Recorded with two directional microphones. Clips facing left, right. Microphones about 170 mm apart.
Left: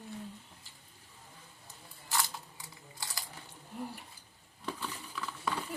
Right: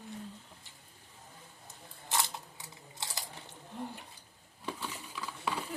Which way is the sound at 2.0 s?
20° right (ahead or behind).